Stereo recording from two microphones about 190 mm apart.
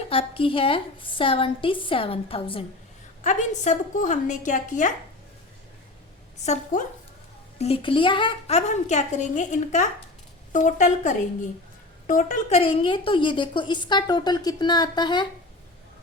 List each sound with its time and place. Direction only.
0.1 s a woman's voice: 30° left (ahead or behind)
6.4 s a woman's voice: 35° left (ahead or behind)
12.5 s a woman's voice: 30° left (ahead or behind)